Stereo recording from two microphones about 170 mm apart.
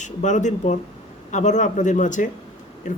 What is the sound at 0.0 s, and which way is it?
Speech, 45° left (ahead or behind).